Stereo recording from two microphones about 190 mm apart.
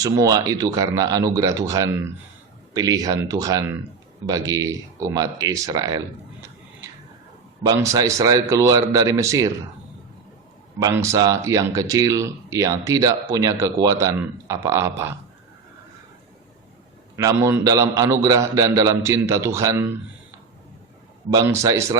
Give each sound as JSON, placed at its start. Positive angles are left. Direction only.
{"t": 0.0, "sound": "speech", "side_deg": -20}
{"t": 7.6, "sound": "speech", "side_deg": -20}
{"t": 10.8, "sound": "speech", "side_deg": -15}
{"t": 17.2, "sound": "speech", "side_deg": -15}
{"t": 21.3, "sound": "speech", "side_deg": -15}